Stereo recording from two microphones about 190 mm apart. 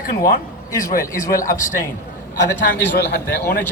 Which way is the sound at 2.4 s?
70° left (ahead or behind).